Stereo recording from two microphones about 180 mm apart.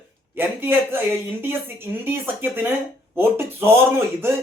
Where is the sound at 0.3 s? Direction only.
10° right (ahead or behind).